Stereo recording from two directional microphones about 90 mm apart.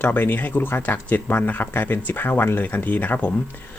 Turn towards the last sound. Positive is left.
turn(degrees=20)  # may be behind; listen again after turning